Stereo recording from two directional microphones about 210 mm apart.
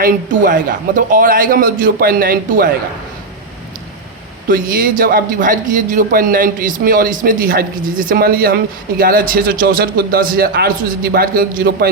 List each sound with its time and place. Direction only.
0.0 s a man's voice: 40° right (ahead or behind)
4.4 s a man's voice: 40° right (ahead or behind)